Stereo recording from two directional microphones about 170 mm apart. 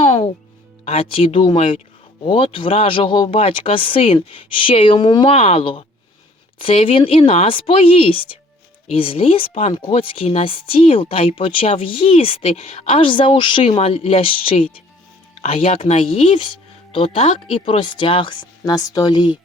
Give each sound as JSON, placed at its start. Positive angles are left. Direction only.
{"t": 0.0, "sound": "music", "side_deg": 30}
{"t": 0.9, "sound": "speech", "side_deg": 35}